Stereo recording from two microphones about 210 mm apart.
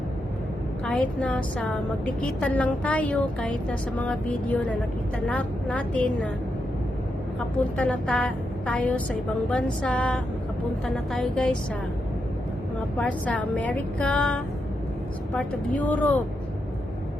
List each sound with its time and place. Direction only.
0.9 s a woman's voice: 5° left (ahead or behind)
7.3 s a woman's voice: 5° left (ahead or behind)
13.0 s a woman's voice: 5° left (ahead or behind)